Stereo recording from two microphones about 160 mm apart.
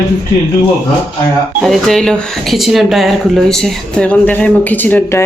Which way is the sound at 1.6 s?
Centre (ahead or behind).